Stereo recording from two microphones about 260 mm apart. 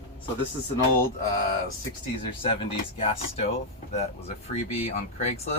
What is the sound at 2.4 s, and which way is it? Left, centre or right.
Speech, left.